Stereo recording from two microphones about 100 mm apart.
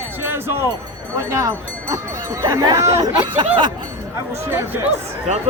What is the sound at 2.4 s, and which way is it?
Speech, 40° right (ahead or behind).